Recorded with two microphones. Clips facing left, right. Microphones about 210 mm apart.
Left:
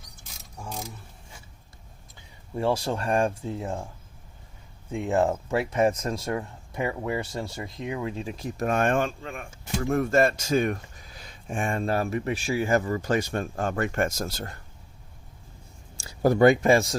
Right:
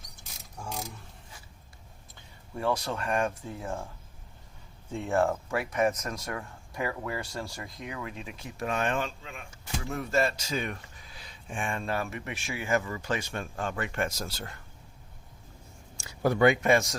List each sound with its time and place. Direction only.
0.6 s mechanisms: 5° left (ahead or behind)
2.6 s speech: 30° left (ahead or behind)
4.9 s speech: 15° left (ahead or behind); by 14.6 s 40° left (ahead or behind)
16.0 s speech: 35° left (ahead or behind)